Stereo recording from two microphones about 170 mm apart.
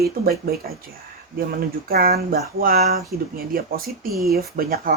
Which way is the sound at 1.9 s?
60° right (ahead or behind).